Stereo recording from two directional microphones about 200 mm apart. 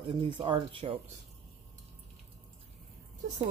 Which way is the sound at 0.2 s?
25° right (ahead or behind).